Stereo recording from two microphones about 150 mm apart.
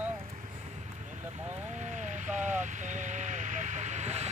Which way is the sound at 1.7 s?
55° right (ahead or behind).